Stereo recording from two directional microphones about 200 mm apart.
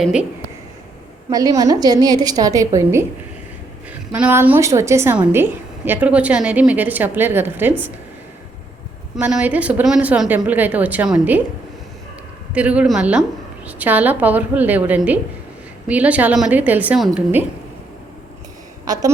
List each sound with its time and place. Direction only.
0.0 s speech: 5° right (ahead or behind)
1.3 s a woman's voice: 20° right (ahead or behind)
4.1 s a woman's voice: 10° right (ahead or behind)
9.1 s a woman's voice: 5° right (ahead or behind)
12.5 s a woman's voice: 5° right (ahead or behind)